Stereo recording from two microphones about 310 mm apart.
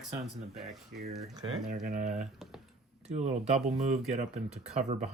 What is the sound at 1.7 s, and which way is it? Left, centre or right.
Speech, right.